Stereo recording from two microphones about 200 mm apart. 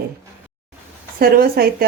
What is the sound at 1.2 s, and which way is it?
Speech, 50° right (ahead or behind).